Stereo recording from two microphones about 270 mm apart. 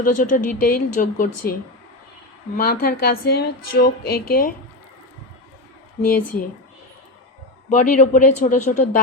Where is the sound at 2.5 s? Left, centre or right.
Left.